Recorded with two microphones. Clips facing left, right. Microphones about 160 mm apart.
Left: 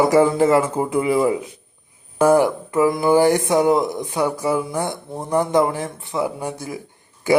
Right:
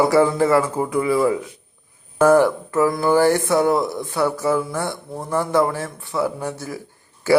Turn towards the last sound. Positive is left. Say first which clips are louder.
# right 1 dB
turn(degrees=15)  # may be behind; listen again after turning